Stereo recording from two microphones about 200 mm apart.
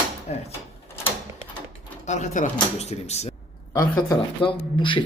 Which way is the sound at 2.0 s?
35° left (ahead or behind).